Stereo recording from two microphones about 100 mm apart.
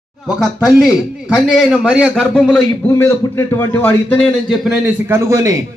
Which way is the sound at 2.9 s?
30° left (ahead or behind).